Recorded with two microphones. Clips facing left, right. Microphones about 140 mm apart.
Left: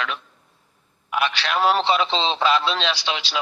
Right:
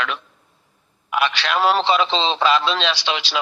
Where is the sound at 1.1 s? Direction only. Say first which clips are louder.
Right 2 dB; 90° right.